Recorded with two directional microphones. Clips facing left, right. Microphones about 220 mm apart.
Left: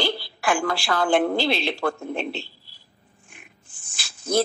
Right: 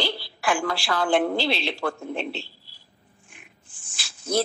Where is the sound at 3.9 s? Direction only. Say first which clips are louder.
Left 2 dB; 50° left (ahead or behind).